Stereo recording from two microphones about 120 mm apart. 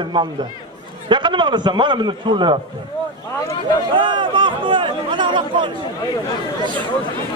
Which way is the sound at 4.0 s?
40° right (ahead or behind).